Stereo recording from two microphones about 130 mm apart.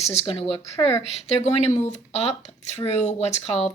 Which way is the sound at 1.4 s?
60° left (ahead or behind).